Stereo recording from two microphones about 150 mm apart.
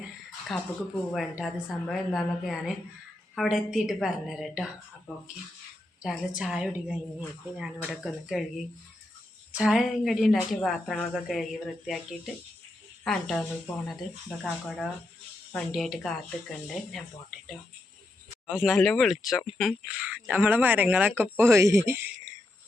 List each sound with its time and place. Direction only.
0.5 s a woman's voice: centre (ahead or behind)
6.0 s a woman's voice: 5° right (ahead or behind)
9.5 s a woman's voice: 5° right (ahead or behind)
14.4 s a woman's voice: 5° left (ahead or behind)
18.4 s a woman's voice: 5° right (ahead or behind)